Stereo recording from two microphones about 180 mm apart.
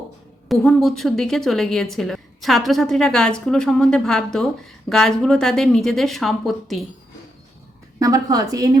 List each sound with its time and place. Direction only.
0.4 s a woman's voice: centre (ahead or behind)
7.9 s a woman's voice: 20° right (ahead or behind)